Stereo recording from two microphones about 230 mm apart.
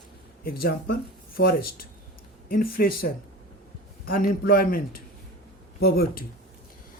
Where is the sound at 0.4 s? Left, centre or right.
Left.